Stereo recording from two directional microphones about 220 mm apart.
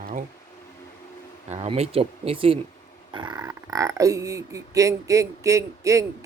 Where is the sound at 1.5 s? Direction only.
25° right (ahead or behind).